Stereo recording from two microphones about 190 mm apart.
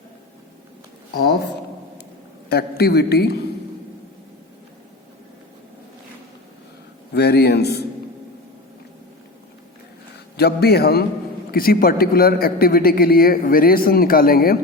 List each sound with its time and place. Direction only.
1.1 s a man's voice: 50° left (ahead or behind)
2.5 s a man's voice: 55° left (ahead or behind)
7.1 s a man's voice: 60° left (ahead or behind)
10.3 s a man's voice: 55° left (ahead or behind)